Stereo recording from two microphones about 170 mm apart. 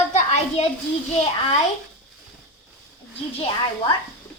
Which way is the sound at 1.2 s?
35° left (ahead or behind).